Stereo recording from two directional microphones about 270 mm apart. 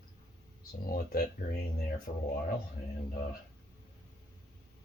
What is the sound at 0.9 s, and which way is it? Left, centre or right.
Speech, left.